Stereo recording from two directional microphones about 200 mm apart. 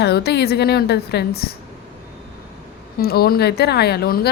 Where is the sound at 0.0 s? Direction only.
55° left (ahead or behind).